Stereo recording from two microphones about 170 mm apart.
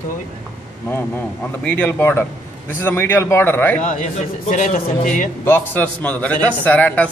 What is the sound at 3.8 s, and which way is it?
Speech, 50° left (ahead or behind).